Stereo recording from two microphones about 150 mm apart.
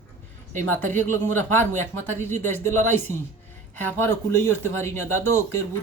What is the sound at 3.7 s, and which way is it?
Speech, 15° left (ahead or behind).